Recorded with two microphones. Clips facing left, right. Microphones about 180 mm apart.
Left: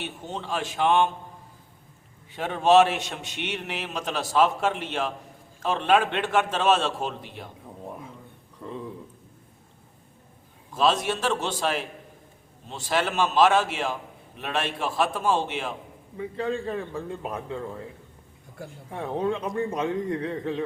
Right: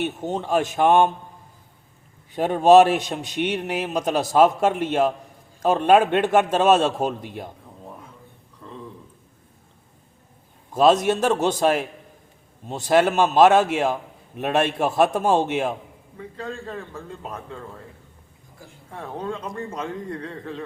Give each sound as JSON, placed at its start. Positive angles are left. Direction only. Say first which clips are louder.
{"t": 0.0, "sound": "a man's voice", "louder": "right 8 dB", "side_deg": -45}
{"t": 2.3, "sound": "a man's voice", "louder": "right 5 dB", "side_deg": -40}
{"t": 10.8, "sound": "a man's voice", "louder": "right 7 dB", "side_deg": -45}
{"t": 16.1, "sound": "a man's voice", "louder": "left 5 dB", "side_deg": 15}
{"t": 18.9, "sound": "a man's voice", "louder": "left 4 dB", "side_deg": 15}